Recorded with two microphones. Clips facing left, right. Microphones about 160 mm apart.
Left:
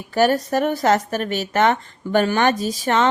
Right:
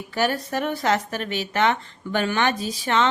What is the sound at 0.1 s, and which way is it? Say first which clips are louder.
A woman's voice: left 7 dB; 40° left (ahead or behind).